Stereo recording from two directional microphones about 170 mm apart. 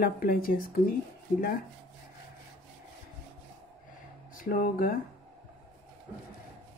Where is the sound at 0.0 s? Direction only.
60° left (ahead or behind).